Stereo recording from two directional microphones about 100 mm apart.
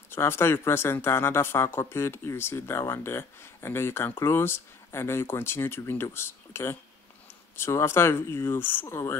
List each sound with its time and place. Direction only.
0.1 s speech: 25° left (ahead or behind)